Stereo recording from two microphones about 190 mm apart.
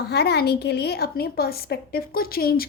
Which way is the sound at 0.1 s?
60° left (ahead or behind).